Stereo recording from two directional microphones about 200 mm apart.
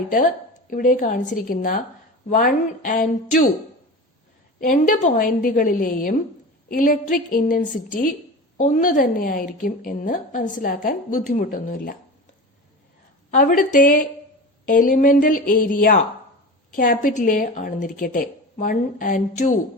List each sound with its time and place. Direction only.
0.7 s a woman's voice: 40° left (ahead or behind)
4.6 s a woman's voice: 40° left (ahead or behind)
13.3 s a woman's voice: 40° left (ahead or behind)